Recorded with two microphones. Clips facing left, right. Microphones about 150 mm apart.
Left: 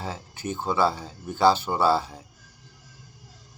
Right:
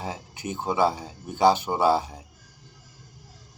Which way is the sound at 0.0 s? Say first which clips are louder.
Even; 15° right (ahead or behind).